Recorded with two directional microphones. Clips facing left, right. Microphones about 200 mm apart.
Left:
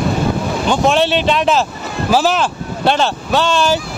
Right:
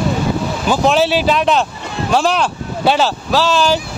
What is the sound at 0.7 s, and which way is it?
Speech, centre (ahead or behind).